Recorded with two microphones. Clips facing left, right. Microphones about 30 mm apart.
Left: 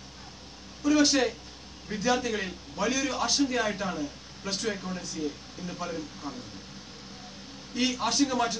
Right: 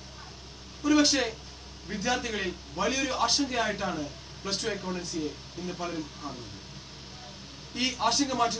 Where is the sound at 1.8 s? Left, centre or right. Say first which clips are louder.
Left 3 dB; centre.